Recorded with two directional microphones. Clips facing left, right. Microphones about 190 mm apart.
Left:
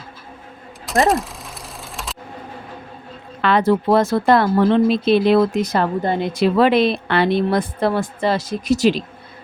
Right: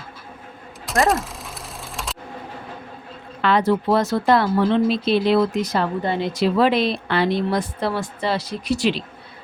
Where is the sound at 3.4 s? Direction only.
55° left (ahead or behind).